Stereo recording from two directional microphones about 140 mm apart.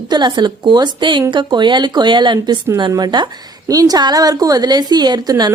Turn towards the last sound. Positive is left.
turn(degrees=-25)  # may be behind; listen again after turning